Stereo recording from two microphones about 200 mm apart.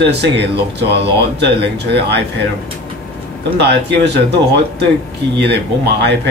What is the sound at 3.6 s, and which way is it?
Speech, 55° right (ahead or behind).